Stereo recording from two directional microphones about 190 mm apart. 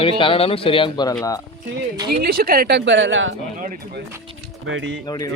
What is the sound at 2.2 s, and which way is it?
Speech, 50° right (ahead or behind).